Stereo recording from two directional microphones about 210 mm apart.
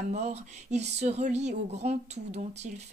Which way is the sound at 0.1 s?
30° right (ahead or behind).